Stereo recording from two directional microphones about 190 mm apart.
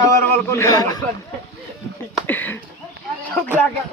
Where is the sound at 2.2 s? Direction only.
10° left (ahead or behind).